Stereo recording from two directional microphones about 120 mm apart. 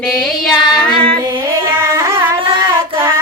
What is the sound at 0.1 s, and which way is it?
Child singing, 5° left (ahead or behind).